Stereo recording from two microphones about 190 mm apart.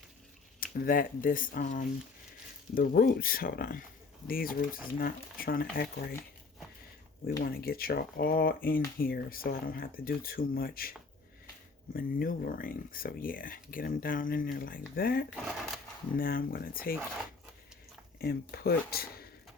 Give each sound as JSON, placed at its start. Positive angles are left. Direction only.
{"t": 0.6, "sound": "speech", "side_deg": 50}
{"t": 7.4, "sound": "speech", "side_deg": 50}
{"t": 11.9, "sound": "speech", "side_deg": 50}
{"t": 18.2, "sound": "speech", "side_deg": 55}